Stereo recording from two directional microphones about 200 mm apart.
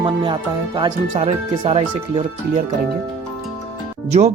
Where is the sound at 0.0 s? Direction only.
25° right (ahead or behind).